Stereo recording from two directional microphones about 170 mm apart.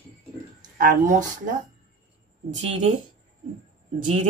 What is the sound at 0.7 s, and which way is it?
Speech, 55° right (ahead or behind).